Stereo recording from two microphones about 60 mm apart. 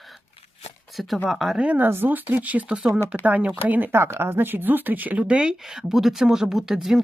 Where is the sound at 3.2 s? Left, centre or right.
Right.